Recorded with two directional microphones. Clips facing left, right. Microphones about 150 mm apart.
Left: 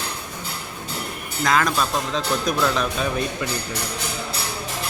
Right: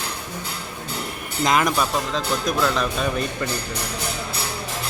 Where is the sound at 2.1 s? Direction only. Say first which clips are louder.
Left 2 dB; centre (ahead or behind).